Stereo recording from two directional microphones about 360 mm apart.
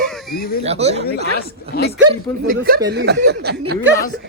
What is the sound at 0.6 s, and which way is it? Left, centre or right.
Speech, centre.